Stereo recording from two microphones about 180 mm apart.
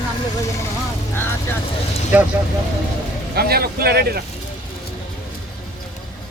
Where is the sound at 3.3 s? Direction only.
60° right (ahead or behind).